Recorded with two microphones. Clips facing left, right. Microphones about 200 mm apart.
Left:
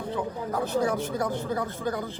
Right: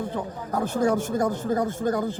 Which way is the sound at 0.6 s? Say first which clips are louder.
Right 4 dB; 45° right (ahead or behind).